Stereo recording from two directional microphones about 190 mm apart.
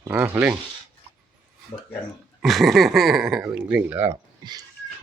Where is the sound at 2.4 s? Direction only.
Centre (ahead or behind).